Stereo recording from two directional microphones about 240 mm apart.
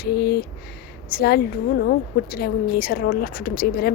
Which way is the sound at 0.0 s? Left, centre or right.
Left.